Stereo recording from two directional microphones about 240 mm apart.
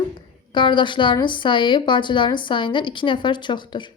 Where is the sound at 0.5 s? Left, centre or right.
Centre.